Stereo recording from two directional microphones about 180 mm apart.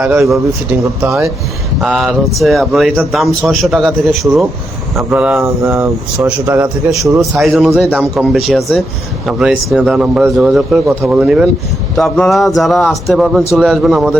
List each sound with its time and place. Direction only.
0.0 s speech: 15° right (ahead or behind)
1.8 s speech: centre (ahead or behind)
10.8 s speech: 10° right (ahead or behind)